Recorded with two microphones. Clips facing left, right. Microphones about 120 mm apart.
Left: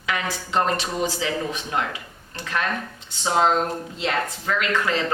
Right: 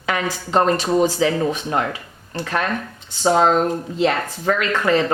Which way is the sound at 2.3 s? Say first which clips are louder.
Right 4 dB; 45° right (ahead or behind).